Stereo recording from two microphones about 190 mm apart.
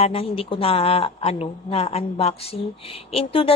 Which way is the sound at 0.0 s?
30° left (ahead or behind).